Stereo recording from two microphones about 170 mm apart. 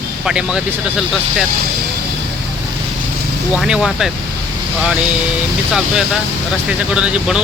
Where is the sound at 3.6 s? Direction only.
5° right (ahead or behind).